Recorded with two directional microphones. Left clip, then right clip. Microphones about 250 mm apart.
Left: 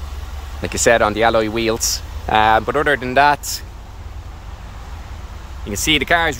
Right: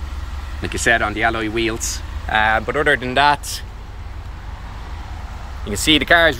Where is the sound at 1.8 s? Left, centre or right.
Left.